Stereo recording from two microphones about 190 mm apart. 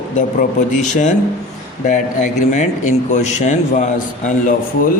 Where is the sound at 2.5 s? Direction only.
40° left (ahead or behind).